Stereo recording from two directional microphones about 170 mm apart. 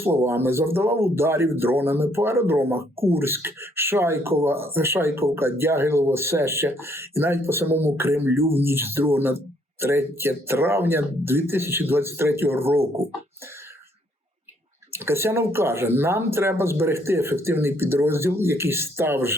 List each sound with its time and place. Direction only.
0.0 s speech: 15° right (ahead or behind)
14.9 s speech: 15° right (ahead or behind)